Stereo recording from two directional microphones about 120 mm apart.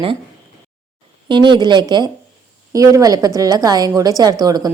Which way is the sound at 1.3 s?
40° right (ahead or behind).